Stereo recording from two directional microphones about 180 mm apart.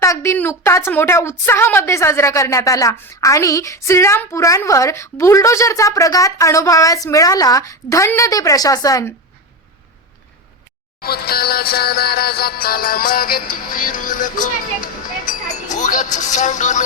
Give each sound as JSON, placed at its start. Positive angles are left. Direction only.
{"t": 0.0, "sound": "a woman's voice", "side_deg": 15}
{"t": 11.0, "sound": "music", "side_deg": 60}
{"t": 15.3, "sound": "a sound", "side_deg": 45}
{"t": 16.1, "sound": "music", "side_deg": 40}